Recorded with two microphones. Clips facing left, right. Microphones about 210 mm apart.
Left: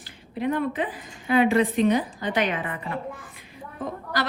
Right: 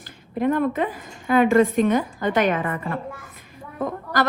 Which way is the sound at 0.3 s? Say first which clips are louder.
Right 4 dB; 50° right (ahead or behind).